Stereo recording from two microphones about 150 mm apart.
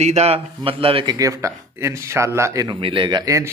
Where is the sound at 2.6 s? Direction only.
35° right (ahead or behind).